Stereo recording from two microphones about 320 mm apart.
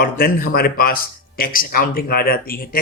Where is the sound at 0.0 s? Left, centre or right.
Left.